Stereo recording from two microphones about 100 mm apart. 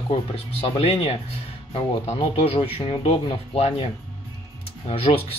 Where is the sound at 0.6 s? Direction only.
90° left.